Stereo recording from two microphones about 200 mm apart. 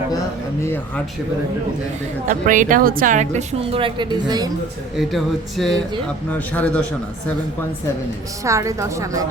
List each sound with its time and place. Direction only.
0.6 s speech: 10° left (ahead or behind)
2.3 s speech: 40° right (ahead or behind); by 4.5 s 20° right (ahead or behind)
4.9 s a sound: centre (ahead or behind)
6.5 s speech: 5° left (ahead or behind)
8.4 s a woman's voice: 15° right (ahead or behind)